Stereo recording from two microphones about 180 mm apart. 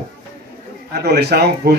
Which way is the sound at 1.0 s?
65° right (ahead or behind).